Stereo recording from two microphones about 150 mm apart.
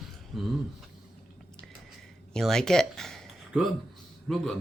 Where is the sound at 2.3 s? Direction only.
5° left (ahead or behind).